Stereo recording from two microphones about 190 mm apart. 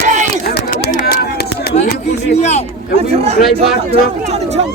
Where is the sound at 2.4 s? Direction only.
35° left (ahead or behind).